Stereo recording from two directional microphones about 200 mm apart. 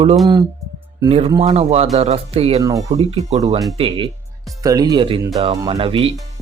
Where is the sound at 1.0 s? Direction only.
30° right (ahead or behind).